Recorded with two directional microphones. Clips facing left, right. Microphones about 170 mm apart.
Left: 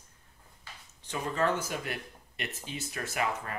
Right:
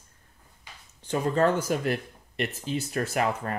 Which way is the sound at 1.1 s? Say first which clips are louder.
Right 6 dB; 40° right (ahead or behind).